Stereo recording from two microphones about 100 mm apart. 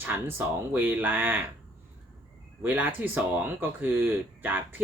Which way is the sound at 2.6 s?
20° right (ahead or behind).